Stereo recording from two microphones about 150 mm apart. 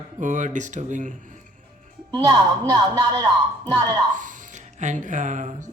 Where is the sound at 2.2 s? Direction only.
25° right (ahead or behind).